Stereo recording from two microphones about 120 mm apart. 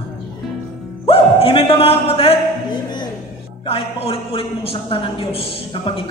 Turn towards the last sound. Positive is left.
turn(degrees=50)  # may be behind; listen again after turning